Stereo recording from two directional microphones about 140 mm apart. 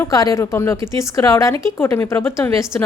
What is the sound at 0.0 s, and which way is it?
Speech, 25° left (ahead or behind).